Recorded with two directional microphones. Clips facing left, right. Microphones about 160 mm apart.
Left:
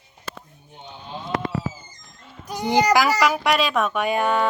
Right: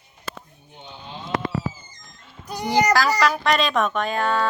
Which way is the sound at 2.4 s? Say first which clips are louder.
Left 1 dB; 15° left (ahead or behind).